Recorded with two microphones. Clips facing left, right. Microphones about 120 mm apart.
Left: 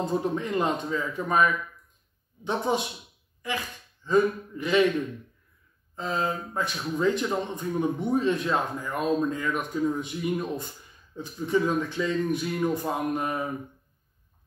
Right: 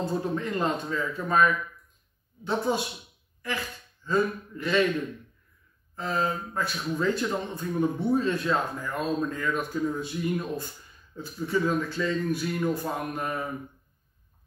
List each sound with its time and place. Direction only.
0.0 s speech: 20° left (ahead or behind)
4.0 s speech: 15° left (ahead or behind)
5.9 s speech: 20° left (ahead or behind)